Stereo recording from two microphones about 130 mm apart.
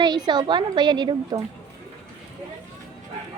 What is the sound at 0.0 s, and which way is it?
A woman's voice, 35° right (ahead or behind).